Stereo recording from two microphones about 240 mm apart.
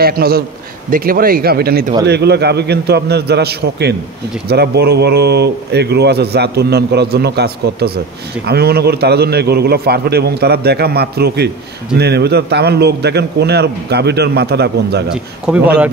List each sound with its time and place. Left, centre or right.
0.0 s a man's voice: right
15.0 s a man's voice: centre